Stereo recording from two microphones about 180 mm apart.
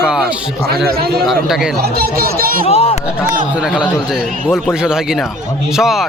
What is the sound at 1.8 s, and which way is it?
Speech, 60° right (ahead or behind).